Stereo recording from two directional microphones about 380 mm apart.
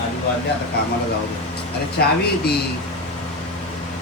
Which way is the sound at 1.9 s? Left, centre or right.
Left.